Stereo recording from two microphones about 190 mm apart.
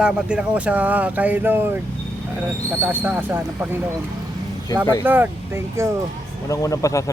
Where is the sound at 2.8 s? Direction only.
10° right (ahead or behind).